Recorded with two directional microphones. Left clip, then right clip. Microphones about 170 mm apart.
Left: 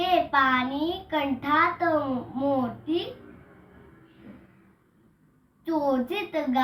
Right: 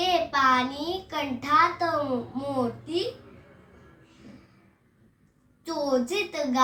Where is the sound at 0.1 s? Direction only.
20° right (ahead or behind).